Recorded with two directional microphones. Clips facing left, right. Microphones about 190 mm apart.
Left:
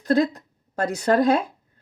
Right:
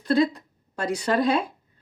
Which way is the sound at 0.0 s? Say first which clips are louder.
Left 1 dB; 45° left (ahead or behind).